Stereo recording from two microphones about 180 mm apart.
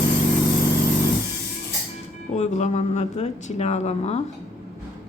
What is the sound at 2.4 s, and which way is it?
Speech, 40° left (ahead or behind).